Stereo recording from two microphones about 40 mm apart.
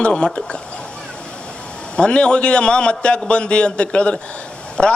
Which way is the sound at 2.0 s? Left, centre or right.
Left.